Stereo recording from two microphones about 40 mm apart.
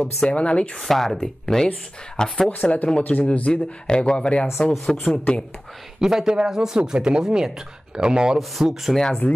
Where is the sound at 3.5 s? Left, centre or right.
Left.